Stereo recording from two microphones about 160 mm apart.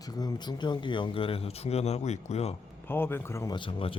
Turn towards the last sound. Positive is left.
turn(degrees=35)  # may be behind; listen again after turning